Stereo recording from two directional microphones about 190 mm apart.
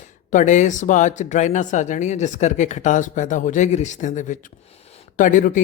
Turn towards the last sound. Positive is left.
turn(degrees=45)  # may be behind; listen again after turning